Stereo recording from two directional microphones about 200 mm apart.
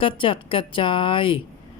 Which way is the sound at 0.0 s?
25° left (ahead or behind).